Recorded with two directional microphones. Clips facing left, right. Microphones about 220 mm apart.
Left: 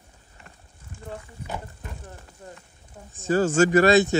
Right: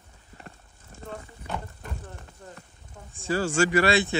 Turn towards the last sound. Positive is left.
turn(degrees=45)  # may be behind; listen again after turning